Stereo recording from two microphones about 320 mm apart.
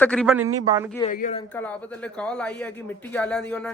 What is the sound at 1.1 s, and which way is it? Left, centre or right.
Speech, left.